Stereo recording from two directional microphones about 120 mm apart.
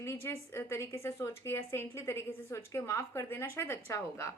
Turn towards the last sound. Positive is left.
turn(degrees=25)  # may be behind; listen again after turning